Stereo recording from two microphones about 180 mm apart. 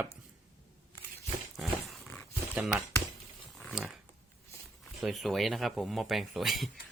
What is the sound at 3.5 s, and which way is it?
Pig, centre (ahead or behind).